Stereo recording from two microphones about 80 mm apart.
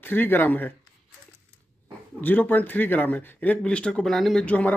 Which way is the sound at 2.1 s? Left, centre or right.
Left.